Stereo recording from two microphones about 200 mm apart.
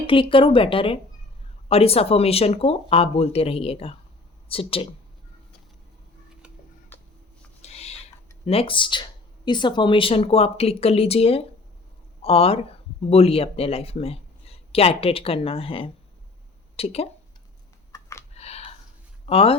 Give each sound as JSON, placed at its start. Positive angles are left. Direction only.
{"t": 0.1, "sound": "speech", "side_deg": 25}
{"t": 6.9, "sound": "a sound", "side_deg": 10}
{"t": 7.6, "sound": "owl", "side_deg": 30}
{"t": 8.4, "sound": "speech", "side_deg": 25}
{"t": 18.3, "sound": "a sound", "side_deg": 30}
{"t": 19.2, "sound": "speech", "side_deg": 30}